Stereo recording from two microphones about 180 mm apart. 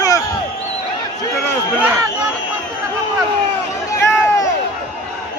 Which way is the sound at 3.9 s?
20° left (ahead or behind).